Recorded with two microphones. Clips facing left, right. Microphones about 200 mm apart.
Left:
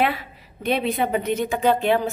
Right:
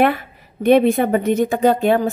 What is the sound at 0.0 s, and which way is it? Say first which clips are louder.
A woman's voice: right 6 dB; 50° right (ahead or behind).